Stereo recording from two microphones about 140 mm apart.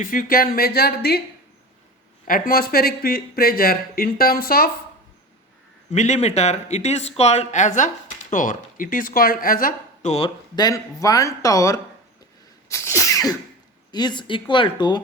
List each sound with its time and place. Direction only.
0.0 s speech: 75° left (ahead or behind)
2.2 s speech: 85° left
5.9 s speech: 55° left (ahead or behind); by 10.1 s 90° left
10.1 s speech: 40° left (ahead or behind)
10.5 s speech: 30° left (ahead or behind)
12.6 s sneeze: 20° left (ahead or behind)
13.9 s speech: 30° left (ahead or behind)